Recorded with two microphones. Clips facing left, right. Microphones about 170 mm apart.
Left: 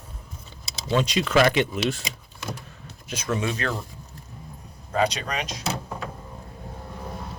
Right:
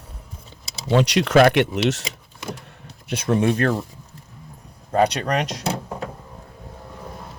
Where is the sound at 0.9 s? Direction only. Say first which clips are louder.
Right 5 dB; 70° right (ahead or behind).